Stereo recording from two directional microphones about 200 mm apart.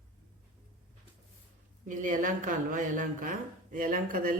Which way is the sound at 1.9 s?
40° right (ahead or behind).